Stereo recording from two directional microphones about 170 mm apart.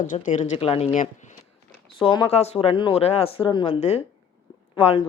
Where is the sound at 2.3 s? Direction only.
40° left (ahead or behind).